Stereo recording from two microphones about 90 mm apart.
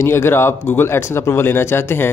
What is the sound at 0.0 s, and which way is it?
Speech, 30° left (ahead or behind).